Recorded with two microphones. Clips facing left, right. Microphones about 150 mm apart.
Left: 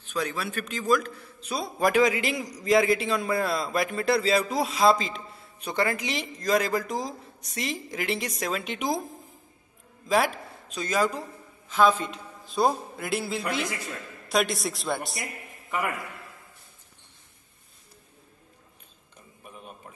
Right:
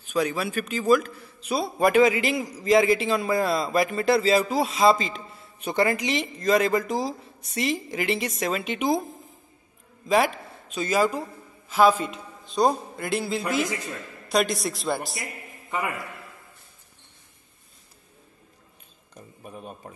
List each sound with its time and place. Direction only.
0.0 s a man's voice: 10° right (ahead or behind)
12.4 s a man's voice: 5° left (ahead or behind)
15.7 s a man's voice: 20° right (ahead or behind)
19.4 s a sound: 35° right (ahead or behind)